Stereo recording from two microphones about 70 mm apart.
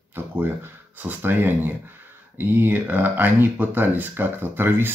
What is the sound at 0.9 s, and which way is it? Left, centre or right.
Speech, right.